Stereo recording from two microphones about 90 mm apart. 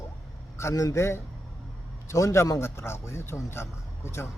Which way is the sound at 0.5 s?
35° left (ahead or behind).